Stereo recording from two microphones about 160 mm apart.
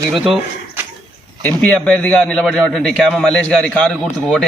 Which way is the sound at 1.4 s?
10° left (ahead or behind).